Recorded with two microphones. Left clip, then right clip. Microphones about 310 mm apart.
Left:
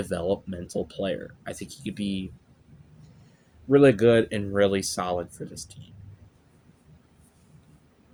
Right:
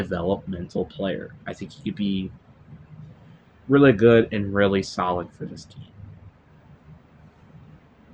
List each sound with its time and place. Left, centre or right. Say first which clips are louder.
0.0 s speech: right 2 dB; left
3.7 s speech: right 2 dB; left